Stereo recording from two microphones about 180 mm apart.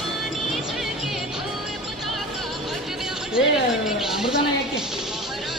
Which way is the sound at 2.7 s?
Centre (ahead or behind).